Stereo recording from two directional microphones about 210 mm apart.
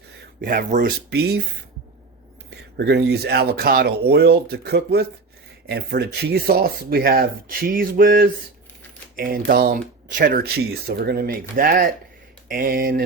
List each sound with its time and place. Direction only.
0.4 s speech: 45° right (ahead or behind)
2.5 s speech: 50° right (ahead or behind)